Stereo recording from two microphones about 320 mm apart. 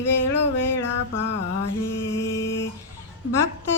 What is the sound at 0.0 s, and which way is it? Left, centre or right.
Music, left.